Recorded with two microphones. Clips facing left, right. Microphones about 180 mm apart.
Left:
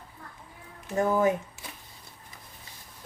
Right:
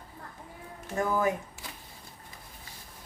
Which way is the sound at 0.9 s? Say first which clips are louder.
Left 4 dB; 20° left (ahead or behind).